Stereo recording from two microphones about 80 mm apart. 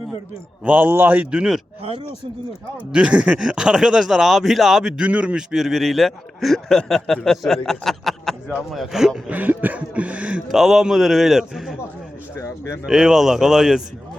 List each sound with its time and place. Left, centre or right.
0.6 s a man's voice: centre
1.3 s a sound: centre
2.7 s speech: centre
9.3 s a sound: right
10.5 s speech: centre
12.3 s speech: left
12.8 s speech: centre